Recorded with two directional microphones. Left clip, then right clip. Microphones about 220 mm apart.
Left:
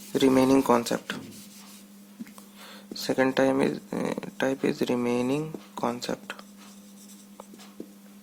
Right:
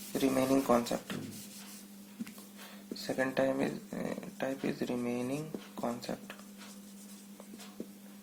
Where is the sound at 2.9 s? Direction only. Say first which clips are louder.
Left 8 dB; 40° left (ahead or behind).